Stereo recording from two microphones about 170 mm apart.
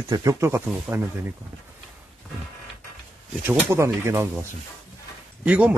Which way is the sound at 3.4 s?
10° right (ahead or behind).